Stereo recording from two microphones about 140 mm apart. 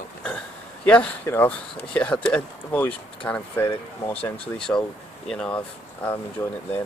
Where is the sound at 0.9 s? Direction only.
10° left (ahead or behind).